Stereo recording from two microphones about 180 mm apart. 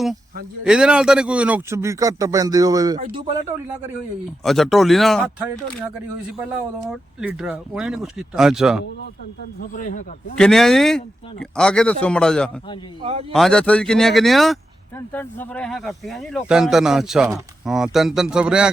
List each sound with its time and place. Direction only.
0.6 s a man's voice: 5° right (ahead or behind); by 3.4 s 25° right (ahead or behind)
4.4 s speech: centre (ahead or behind)
6.9 s speech: 5° right (ahead or behind)
9.6 s a man's voice: 45° left (ahead or behind)
10.3 s speech: 5° left (ahead or behind)
13.0 s a man's voice: 35° right (ahead or behind)
13.3 s speech: 5° left (ahead or behind)